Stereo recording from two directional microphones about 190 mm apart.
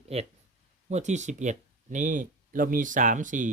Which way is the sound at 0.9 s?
35° right (ahead or behind).